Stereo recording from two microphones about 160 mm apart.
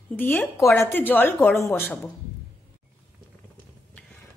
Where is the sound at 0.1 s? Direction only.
10° left (ahead or behind).